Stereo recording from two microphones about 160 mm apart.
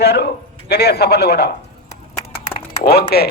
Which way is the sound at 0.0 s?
85° left.